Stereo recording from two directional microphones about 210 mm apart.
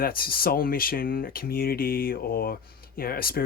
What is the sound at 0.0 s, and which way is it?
Speech, 45° left (ahead or behind).